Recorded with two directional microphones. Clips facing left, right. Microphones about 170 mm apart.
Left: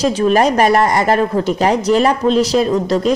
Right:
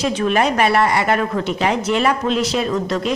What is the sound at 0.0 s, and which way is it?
A woman's voice, 40° left (ahead or behind).